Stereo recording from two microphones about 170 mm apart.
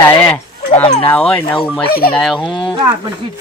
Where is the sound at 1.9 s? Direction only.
65° left (ahead or behind).